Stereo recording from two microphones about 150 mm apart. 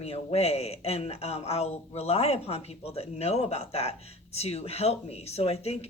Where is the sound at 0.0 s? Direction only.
45° left (ahead or behind).